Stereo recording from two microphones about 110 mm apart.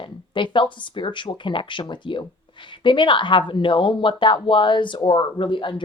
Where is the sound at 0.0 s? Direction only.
50° left (ahead or behind).